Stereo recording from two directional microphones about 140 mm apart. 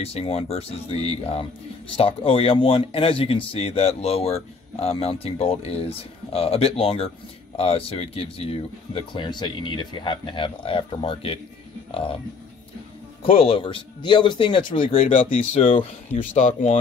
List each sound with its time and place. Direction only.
0.0 s speech: 45° left (ahead or behind)
13.2 s speech: 40° left (ahead or behind)
16.3 s speech: 65° left (ahead or behind)